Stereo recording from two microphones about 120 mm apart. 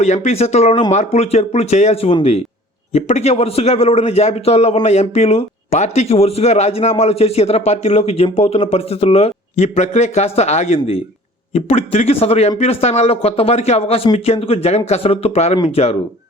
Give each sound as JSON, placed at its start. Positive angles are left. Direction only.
{"t": 0.0, "sound": "a man's voice", "side_deg": 70}